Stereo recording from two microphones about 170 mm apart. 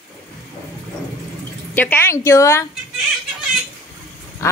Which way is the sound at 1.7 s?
10° left (ahead or behind).